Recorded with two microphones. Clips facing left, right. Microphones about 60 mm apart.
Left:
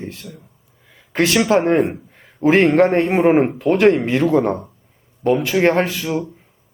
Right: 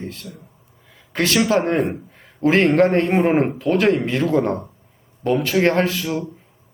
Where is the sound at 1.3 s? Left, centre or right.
Centre.